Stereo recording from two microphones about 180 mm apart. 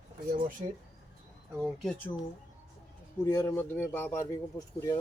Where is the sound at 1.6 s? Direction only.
Centre (ahead or behind).